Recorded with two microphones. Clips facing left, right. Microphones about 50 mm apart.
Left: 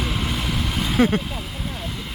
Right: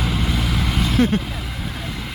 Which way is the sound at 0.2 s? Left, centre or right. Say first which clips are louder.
Right 2 dB; centre.